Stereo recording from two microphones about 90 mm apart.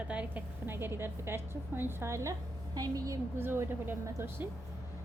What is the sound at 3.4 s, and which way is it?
A woman's voice, 25° right (ahead or behind).